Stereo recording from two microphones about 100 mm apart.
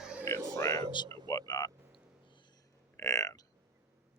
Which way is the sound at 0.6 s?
30° left (ahead or behind).